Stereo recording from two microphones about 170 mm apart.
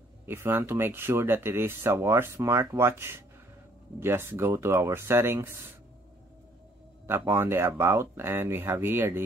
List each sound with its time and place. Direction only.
0.3 s speech: 15° right (ahead or behind)
7.1 s speech: 15° right (ahead or behind)